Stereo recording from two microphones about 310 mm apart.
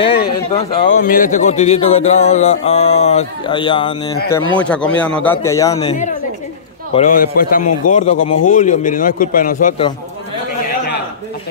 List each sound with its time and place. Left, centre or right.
0.6 s speech: centre
1.0 s speech: left
4.6 s a man's voice: centre
6.9 s speech: left
8.2 s a man's voice: left
8.5 s speech: left